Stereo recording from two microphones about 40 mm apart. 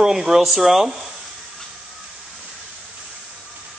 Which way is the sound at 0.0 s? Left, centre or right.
Centre.